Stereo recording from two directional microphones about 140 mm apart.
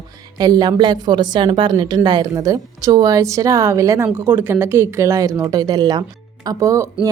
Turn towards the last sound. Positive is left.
turn(degrees=-25)  # may be behind; listen again after turning